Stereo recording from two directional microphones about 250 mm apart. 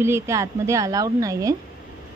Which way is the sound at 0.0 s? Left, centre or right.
Centre.